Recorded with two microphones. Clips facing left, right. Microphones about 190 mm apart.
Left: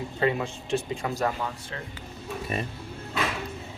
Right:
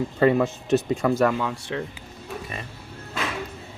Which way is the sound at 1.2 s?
75° right (ahead or behind).